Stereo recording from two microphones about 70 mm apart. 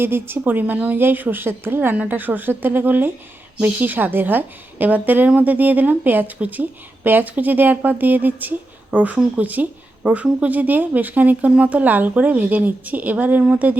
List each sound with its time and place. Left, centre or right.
0.0 s speech: right